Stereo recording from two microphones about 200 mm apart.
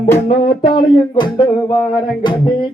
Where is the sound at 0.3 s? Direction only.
25° left (ahead or behind).